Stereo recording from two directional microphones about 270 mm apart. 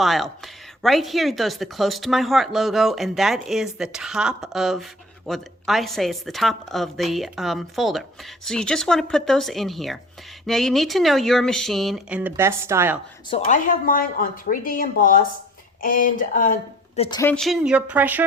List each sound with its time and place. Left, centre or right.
0.0 s speech: centre
13.3 s a woman's voice: left
17.2 s speech: centre